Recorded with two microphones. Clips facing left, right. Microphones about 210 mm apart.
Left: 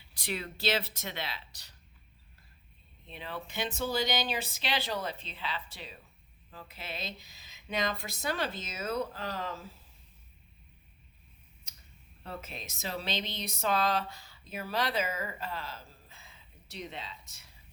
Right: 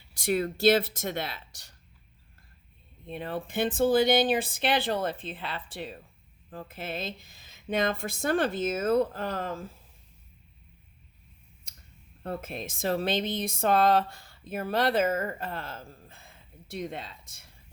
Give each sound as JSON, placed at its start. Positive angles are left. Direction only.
{"t": 0.1, "sound": "speech", "side_deg": -45}
{"t": 3.1, "sound": "speech", "side_deg": -50}
{"t": 12.2, "sound": "speech", "side_deg": -50}